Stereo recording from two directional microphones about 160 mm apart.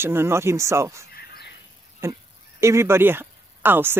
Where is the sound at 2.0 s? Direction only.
15° right (ahead or behind).